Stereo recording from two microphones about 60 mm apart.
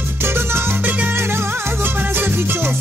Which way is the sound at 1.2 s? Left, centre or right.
Right.